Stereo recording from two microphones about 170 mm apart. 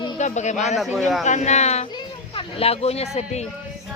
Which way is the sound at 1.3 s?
45° left (ahead or behind).